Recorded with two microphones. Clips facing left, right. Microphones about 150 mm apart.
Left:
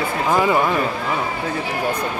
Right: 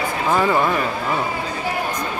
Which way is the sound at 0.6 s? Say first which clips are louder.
Even; centre (ahead or behind).